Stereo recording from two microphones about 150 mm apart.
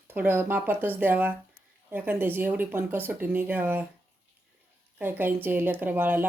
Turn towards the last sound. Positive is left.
turn(degrees=-15)  # may be behind; listen again after turning